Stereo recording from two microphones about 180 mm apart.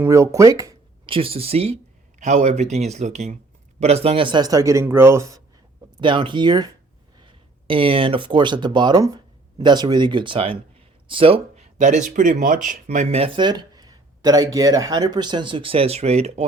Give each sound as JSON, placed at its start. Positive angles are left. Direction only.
{"t": 0.0, "sound": "speech", "side_deg": -15}
{"t": 6.0, "sound": "speech", "side_deg": -25}
{"t": 11.8, "sound": "speech", "side_deg": -45}